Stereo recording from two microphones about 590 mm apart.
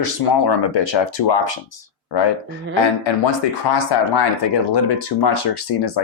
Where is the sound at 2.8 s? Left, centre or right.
Left.